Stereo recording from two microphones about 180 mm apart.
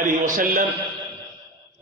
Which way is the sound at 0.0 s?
50° right (ahead or behind).